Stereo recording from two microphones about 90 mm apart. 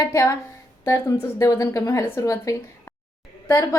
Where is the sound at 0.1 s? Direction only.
35° left (ahead or behind).